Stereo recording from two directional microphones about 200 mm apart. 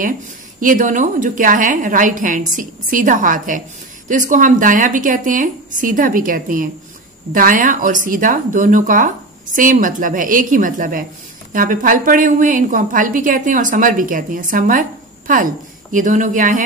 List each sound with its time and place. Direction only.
0.6 s a woman's voice: 40° right (ahead or behind)